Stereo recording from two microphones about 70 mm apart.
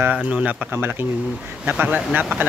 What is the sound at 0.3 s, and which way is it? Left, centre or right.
Speech, centre.